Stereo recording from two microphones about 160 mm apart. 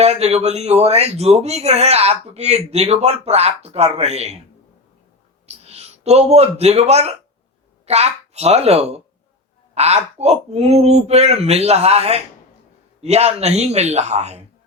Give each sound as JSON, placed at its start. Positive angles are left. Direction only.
{"t": 0.0, "sound": "speech", "side_deg": -40}
{"t": 5.6, "sound": "a child's voice", "side_deg": -40}